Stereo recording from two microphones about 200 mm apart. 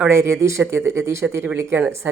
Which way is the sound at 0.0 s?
15° right (ahead or behind).